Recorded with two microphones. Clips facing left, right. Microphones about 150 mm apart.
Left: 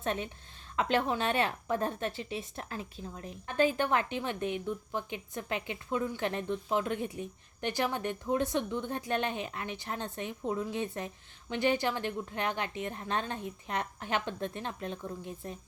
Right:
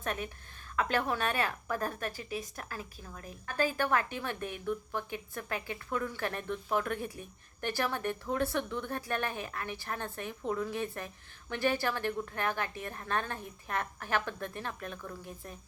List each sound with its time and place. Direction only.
0.0 s a woman's voice: 25° left (ahead or behind)